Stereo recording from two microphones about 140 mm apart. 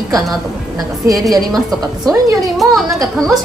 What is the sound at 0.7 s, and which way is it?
Speech, 25° right (ahead or behind).